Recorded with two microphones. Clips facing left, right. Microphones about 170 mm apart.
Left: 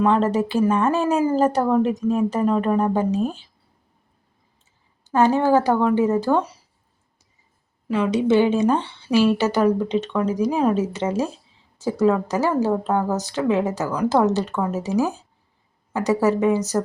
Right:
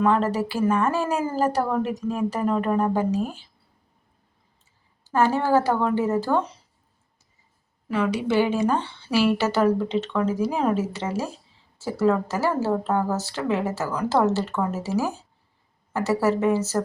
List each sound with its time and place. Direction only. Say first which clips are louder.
0.0 s a woman's voice: left 3 dB; 20° left (ahead or behind)
5.0 s speech: left 4 dB; 20° left (ahead or behind)
7.9 s a woman's voice: left 5 dB; 20° left (ahead or behind)